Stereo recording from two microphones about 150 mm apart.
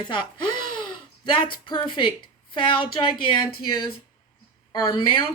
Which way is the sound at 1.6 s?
30° left (ahead or behind).